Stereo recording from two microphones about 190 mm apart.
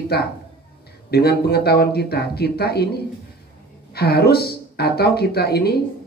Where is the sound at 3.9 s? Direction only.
55° left (ahead or behind).